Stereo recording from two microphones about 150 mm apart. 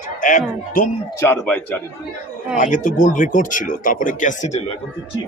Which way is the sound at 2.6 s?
60° left (ahead or behind).